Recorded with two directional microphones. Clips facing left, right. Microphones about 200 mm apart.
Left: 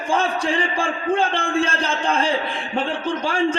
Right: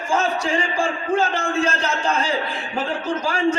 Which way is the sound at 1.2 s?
30° left (ahead or behind).